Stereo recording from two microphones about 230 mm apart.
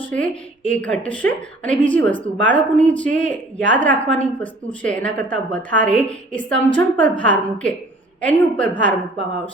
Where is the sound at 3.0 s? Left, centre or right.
Centre.